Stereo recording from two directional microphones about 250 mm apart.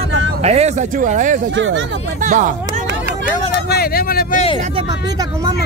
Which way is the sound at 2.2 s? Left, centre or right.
Right.